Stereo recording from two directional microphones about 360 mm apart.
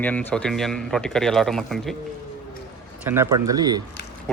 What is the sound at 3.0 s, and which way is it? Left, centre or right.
Speech, centre.